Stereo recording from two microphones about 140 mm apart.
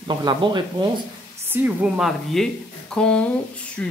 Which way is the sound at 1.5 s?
15° right (ahead or behind).